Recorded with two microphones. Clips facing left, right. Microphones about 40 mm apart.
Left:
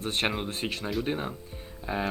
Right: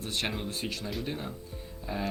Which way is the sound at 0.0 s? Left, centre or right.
Left.